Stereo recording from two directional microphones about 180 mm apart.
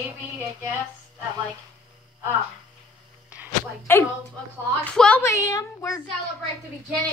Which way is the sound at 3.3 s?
5° right (ahead or behind).